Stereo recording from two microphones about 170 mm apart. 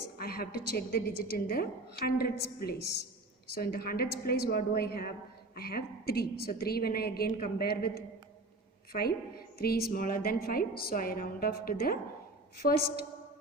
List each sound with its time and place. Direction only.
0.2 s a woman's voice: 60° left (ahead or behind)